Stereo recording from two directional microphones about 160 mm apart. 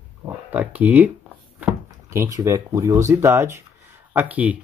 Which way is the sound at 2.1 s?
20° right (ahead or behind).